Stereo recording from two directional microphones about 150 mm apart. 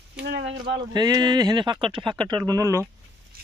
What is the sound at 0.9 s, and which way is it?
Speech, 25° right (ahead or behind).